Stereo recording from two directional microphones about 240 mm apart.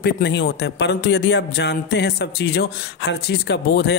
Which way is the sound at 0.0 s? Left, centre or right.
Left.